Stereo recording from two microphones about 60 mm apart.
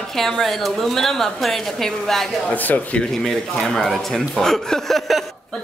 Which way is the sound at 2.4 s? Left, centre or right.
Left.